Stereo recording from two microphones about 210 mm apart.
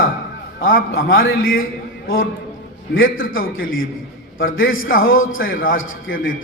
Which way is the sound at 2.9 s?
70° left (ahead or behind).